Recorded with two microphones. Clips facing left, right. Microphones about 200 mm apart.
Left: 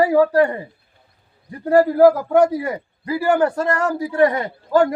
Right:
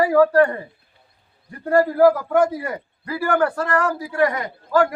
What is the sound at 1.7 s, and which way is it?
A man's voice, 20° left (ahead or behind).